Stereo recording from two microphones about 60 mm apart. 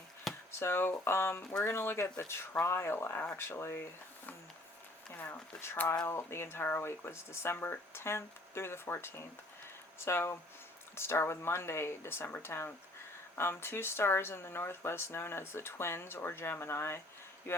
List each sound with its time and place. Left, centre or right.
0.3 s a sound: centre
0.6 s speech: left
3.4 s speech: left
5.1 s speech: left